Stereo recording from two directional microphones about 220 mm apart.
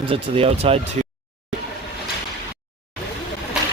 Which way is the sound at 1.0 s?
30° right (ahead or behind).